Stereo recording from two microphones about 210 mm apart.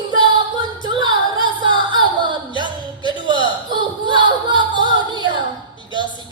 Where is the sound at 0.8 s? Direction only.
20° right (ahead or behind).